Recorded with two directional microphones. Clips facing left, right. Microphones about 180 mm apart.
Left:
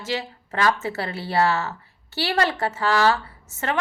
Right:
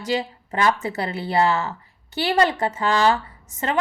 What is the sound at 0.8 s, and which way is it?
A woman's voice, 15° right (ahead or behind).